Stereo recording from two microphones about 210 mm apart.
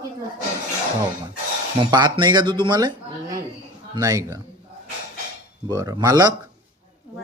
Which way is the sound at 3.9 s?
15° right (ahead or behind).